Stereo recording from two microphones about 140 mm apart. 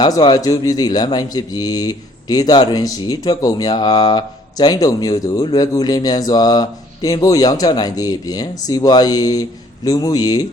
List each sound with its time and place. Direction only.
0.0 s speech: 30° left (ahead or behind)